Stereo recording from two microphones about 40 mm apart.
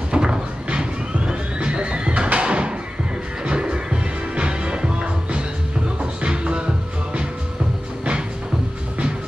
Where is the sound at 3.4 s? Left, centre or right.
Right.